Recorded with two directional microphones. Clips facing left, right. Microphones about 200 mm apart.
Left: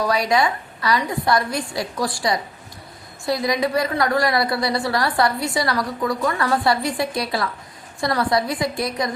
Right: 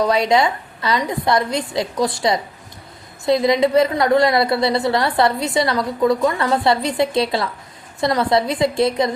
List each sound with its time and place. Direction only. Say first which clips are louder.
0.0 s a woman's voice: right 3 dB; 25° right (ahead or behind)